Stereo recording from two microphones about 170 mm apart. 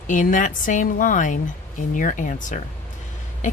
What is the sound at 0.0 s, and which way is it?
A woman's voice, 50° left (ahead or behind).